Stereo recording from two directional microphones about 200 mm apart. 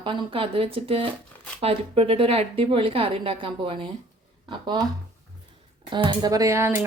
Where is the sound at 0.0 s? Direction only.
25° right (ahead or behind).